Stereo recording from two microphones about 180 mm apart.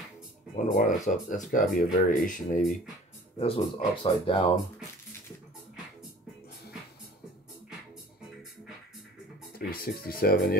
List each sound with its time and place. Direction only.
0.7 s speech: 45° left (ahead or behind)
3.3 s speech: 30° left (ahead or behind)
9.7 s speech: 55° left (ahead or behind)